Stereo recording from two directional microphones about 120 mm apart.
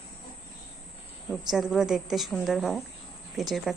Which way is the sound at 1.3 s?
5° right (ahead or behind).